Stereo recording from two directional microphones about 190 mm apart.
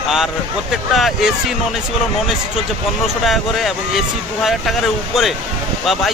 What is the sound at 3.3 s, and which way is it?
Speech, centre (ahead or behind).